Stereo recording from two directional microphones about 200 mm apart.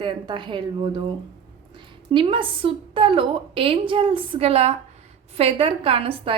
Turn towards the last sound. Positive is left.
turn(degrees=-30)  # may be behind; listen again after turning